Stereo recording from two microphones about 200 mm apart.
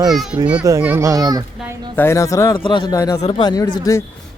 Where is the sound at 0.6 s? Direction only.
10° right (ahead or behind).